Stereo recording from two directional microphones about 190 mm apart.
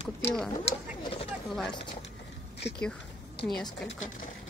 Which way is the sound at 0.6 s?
30° left (ahead or behind).